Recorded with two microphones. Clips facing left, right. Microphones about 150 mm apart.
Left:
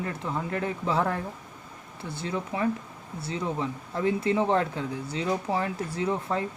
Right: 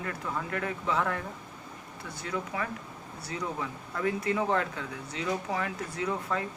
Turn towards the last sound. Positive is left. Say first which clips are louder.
# left 4 dB
turn(degrees=30)  # may be behind; listen again after turning